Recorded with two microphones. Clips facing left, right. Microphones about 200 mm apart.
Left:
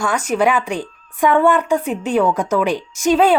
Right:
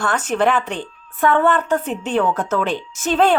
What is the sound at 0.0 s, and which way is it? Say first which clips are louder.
A woman's voice: left 1 dB; 10° left (ahead or behind).